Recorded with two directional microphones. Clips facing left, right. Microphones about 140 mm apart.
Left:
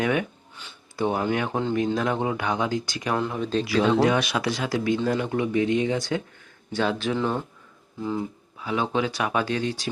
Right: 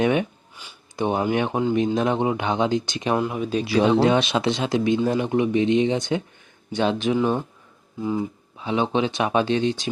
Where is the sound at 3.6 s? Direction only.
25° right (ahead or behind).